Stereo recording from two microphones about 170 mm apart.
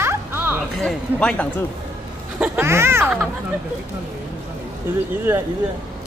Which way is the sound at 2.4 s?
15° right (ahead or behind).